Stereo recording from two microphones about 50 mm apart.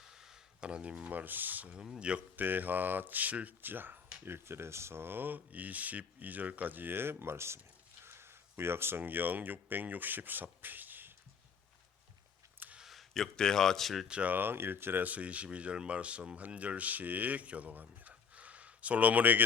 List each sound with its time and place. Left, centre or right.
0.0 s a sound: centre
1.1 s speech: right
1.7 s speech: centre
2.3 s speech: right
4.3 s speech: right
12.8 s a man's voice: centre
14.1 s speech: right
14.3 s speech: right
15.0 s speech: right